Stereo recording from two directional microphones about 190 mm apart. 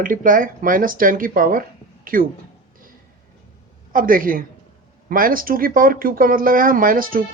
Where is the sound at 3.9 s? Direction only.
45° right (ahead or behind).